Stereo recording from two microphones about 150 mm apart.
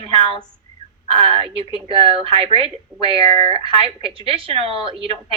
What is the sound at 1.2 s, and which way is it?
A woman's voice, 40° right (ahead or behind).